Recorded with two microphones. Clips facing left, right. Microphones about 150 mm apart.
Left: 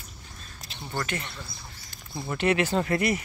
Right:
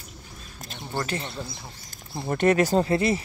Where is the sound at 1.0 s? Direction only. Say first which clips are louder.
Right 4 dB; 30° right (ahead or behind).